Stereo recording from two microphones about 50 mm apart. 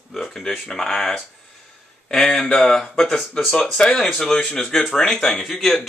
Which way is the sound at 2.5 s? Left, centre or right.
Centre.